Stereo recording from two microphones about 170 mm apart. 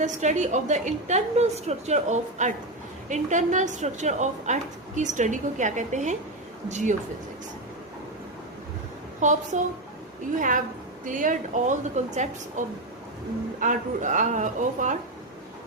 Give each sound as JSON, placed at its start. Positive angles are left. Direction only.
{"t": 0.0, "sound": "a woman's voice", "side_deg": -45}
{"t": 9.2, "sound": "a woman's voice", "side_deg": -45}
{"t": 11.0, "sound": "a woman's voice", "side_deg": -50}